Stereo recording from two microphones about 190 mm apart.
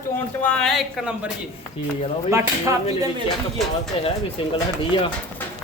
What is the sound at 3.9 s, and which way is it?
Speech, 30° left (ahead or behind).